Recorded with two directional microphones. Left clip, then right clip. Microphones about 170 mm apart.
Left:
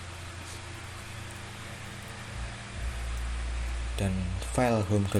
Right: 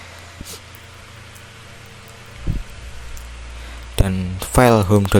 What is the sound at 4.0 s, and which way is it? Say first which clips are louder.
Music: right 11 dB; 65° right (ahead or behind).